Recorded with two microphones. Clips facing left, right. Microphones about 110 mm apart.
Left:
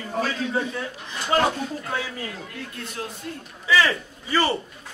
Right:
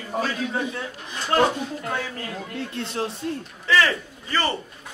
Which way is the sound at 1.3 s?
5° left (ahead or behind).